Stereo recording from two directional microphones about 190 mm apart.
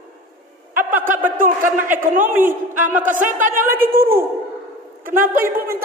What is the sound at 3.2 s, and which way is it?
Speech, 45° right (ahead or behind).